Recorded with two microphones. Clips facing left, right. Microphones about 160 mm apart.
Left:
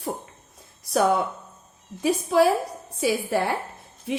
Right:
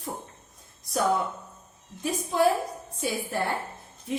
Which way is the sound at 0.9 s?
70° left (ahead or behind).